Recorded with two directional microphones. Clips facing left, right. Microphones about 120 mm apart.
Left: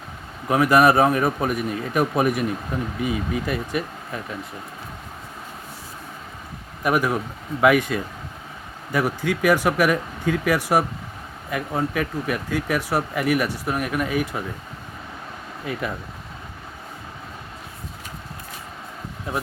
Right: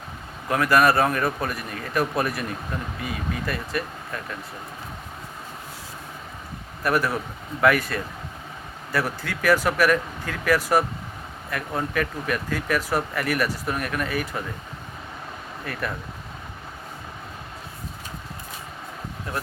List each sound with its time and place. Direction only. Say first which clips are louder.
0.4 s speech: left 3 dB; 15° left (ahead or behind)
6.8 s speech: left 2 dB; 15° left (ahead or behind)